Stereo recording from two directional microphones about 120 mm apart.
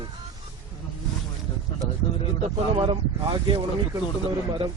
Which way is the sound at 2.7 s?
45° right (ahead or behind).